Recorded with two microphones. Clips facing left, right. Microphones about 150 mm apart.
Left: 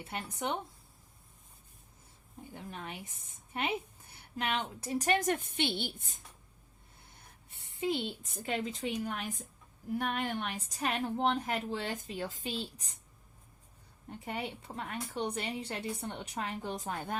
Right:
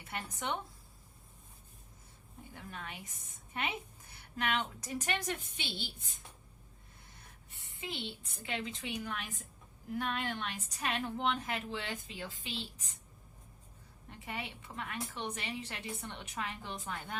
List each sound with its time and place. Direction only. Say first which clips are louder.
0.0 s speech: left 3 dB; 30° left (ahead or behind)
2.5 s a woman's voice: left 3 dB; 25° left (ahead or behind); by 5.9 s 60° left (ahead or behind)
7.8 s a woman's voice: left 9 dB; 40° left (ahead or behind)
14.1 s a woman's voice: left 5 dB; 40° left (ahead or behind)